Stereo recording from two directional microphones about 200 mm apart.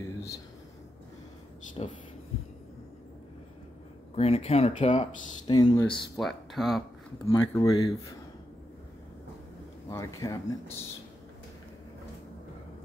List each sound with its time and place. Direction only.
1.8 s speech: 25° left (ahead or behind)
4.1 s speech: 30° left (ahead or behind)
5.5 s speech: 20° left (ahead or behind)
6.1 s speech: centre (ahead or behind)
7.2 s speech: 15° left (ahead or behind)
9.8 s speech: 15° left (ahead or behind)